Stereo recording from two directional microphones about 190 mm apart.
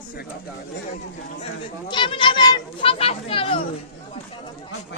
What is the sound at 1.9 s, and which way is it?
Speech, 25° left (ahead or behind).